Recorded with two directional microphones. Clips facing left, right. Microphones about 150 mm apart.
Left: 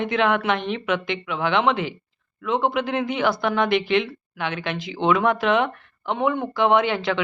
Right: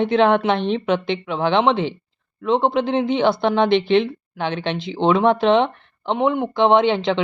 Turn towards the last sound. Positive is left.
turn(degrees=-25)  # may be behind; listen again after turning